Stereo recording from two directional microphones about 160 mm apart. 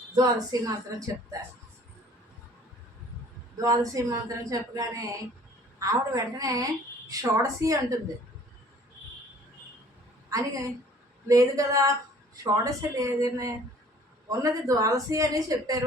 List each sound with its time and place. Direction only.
0.2 s a woman's voice: 25° right (ahead or behind)
3.6 s a woman's voice: 20° right (ahead or behind)
11.3 s a woman's voice: 20° right (ahead or behind)